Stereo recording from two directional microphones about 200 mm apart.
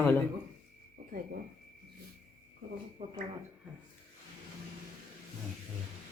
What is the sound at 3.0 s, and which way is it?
Speech, 30° right (ahead or behind).